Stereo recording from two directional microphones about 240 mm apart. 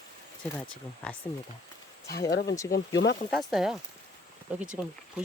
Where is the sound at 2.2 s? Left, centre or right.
Centre.